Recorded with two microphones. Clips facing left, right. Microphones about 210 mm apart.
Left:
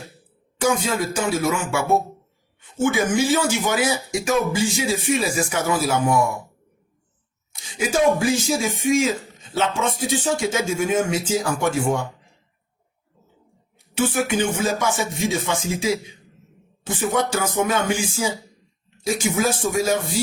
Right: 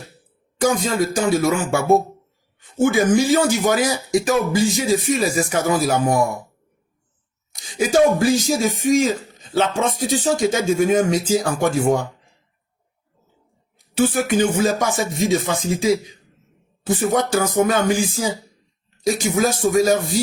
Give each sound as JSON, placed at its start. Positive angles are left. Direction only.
{"t": 0.6, "sound": "speech", "side_deg": -40}
{"t": 7.5, "sound": "speech", "side_deg": -35}
{"t": 13.7, "sound": "speech", "side_deg": -35}